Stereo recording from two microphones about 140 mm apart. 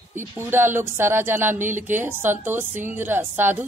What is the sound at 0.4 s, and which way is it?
A man's voice, 15° right (ahead or behind).